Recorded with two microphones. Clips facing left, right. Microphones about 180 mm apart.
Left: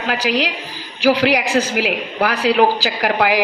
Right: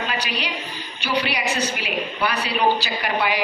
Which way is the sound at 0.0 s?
90° left.